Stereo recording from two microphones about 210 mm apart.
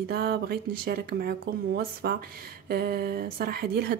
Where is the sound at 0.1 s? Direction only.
50° right (ahead or behind).